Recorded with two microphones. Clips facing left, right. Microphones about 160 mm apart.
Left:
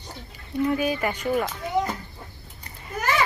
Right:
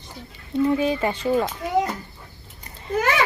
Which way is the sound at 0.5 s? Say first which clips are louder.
Right 3 dB; 25° right (ahead or behind).